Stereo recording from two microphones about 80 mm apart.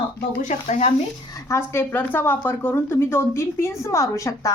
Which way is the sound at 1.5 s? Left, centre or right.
Left.